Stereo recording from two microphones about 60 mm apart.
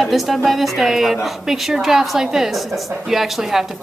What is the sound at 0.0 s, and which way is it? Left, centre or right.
Speech, centre.